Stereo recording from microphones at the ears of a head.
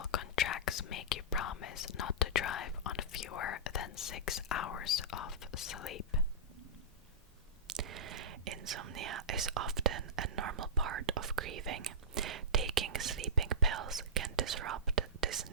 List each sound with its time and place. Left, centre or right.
0.0 s whispering: left
7.7 s whispering: right